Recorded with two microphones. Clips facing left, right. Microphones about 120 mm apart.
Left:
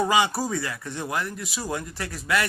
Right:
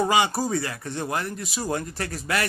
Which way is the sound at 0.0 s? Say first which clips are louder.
Right 1 dB; 20° right (ahead or behind).